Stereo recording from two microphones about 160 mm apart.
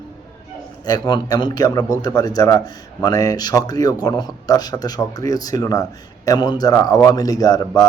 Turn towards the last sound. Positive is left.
turn(degrees=25)  # may be behind; listen again after turning